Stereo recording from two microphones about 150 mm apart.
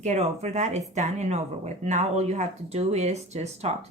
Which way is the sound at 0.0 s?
50° right (ahead or behind).